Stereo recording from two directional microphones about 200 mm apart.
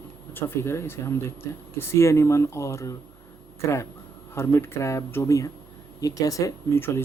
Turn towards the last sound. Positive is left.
turn(degrees=10)  # may be behind; listen again after turning